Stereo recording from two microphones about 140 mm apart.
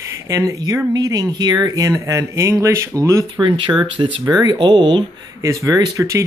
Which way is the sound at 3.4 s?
35° right (ahead or behind).